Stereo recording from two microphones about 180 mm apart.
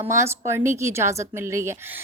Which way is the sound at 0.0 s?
15° right (ahead or behind).